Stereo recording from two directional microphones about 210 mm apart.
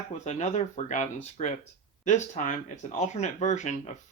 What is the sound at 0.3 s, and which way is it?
Speech, 35° left (ahead or behind).